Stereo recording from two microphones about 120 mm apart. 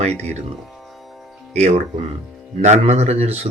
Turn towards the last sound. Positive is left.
turn(degrees=-60)  # may be behind; listen again after turning